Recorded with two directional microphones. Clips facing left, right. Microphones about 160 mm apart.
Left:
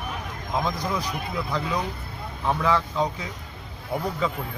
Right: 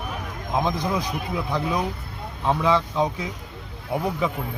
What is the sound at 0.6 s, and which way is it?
A man's voice, 20° right (ahead or behind).